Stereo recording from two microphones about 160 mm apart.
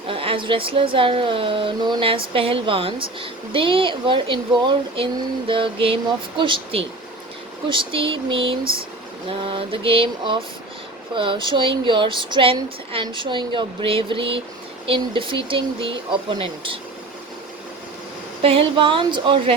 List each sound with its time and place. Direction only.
0.1 s a woman's voice: 35° right (ahead or behind)
18.4 s speech: 35° right (ahead or behind)